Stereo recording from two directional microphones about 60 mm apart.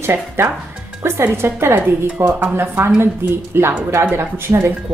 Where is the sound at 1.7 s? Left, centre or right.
Right.